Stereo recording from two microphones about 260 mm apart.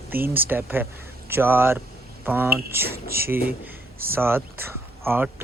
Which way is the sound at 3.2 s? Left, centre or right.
Centre.